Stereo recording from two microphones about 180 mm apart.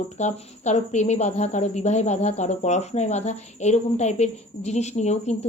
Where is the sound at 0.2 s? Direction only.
40° left (ahead or behind).